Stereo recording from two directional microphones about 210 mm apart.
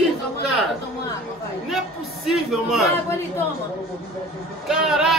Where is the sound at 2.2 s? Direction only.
Centre (ahead or behind).